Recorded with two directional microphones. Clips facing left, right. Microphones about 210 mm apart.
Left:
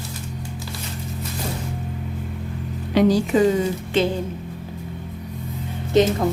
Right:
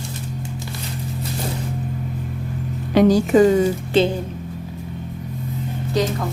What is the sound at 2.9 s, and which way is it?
Speech, 45° right (ahead or behind).